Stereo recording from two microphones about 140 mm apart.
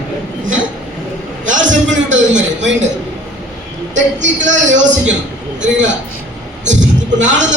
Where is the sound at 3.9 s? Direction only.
60° right (ahead or behind).